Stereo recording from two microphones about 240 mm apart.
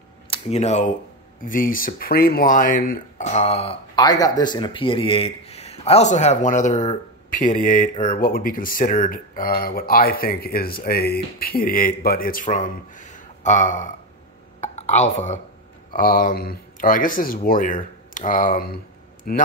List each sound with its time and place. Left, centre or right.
0.3 s speech: left
14.6 s a sound: left
15.9 s speech: left